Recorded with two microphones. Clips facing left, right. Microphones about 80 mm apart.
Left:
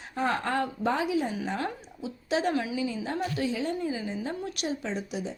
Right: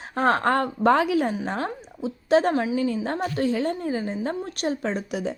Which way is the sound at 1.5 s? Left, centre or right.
Right.